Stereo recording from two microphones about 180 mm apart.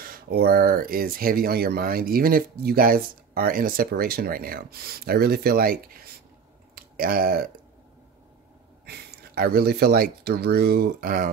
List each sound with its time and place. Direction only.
0.0 s speech: 55° right (ahead or behind)
6.7 s clicking: 55° right (ahead or behind)
8.8 s speech: 65° right (ahead or behind)